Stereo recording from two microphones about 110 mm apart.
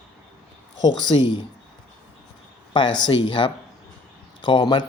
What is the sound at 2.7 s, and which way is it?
Speech, 45° left (ahead or behind).